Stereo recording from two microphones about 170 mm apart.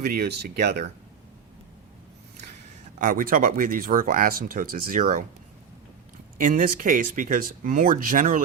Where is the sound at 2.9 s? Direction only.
50° right (ahead or behind).